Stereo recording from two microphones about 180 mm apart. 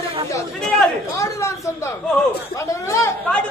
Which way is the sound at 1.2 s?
15° left (ahead or behind).